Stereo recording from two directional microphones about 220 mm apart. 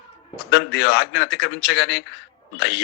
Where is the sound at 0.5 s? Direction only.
50° left (ahead or behind).